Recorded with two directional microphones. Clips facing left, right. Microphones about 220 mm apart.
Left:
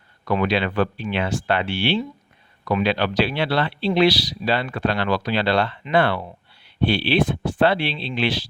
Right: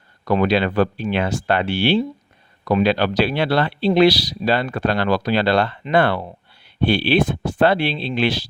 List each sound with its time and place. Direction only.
0.3 s speech: 40° right (ahead or behind)